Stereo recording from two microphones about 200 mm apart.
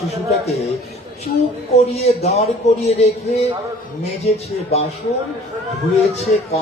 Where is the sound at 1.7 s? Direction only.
35° left (ahead or behind).